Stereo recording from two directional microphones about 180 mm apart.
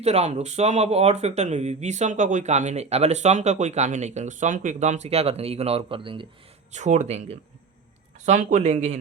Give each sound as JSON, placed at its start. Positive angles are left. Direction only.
{"t": 0.0, "sound": "speech", "side_deg": -35}
{"t": 6.7, "sound": "speech", "side_deg": -40}